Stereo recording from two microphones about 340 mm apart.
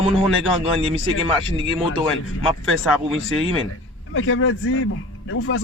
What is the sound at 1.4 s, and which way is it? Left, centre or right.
Speech, left.